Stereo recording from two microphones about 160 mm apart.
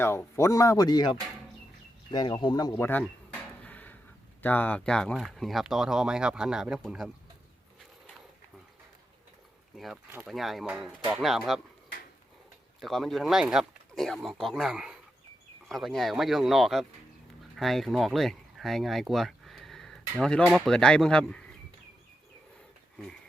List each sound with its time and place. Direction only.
0.0 s speech: 15° left (ahead or behind)
3.6 s a sound: 10° left (ahead or behind)
4.4 s speech: 10° left (ahead or behind)
9.7 s speech: centre (ahead or behind)
12.8 s speech: centre (ahead or behind)